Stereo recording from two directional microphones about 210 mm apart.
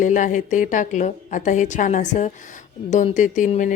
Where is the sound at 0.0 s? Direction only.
35° left (ahead or behind).